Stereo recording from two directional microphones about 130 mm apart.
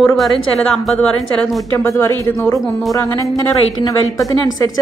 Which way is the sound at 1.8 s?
20° left (ahead or behind).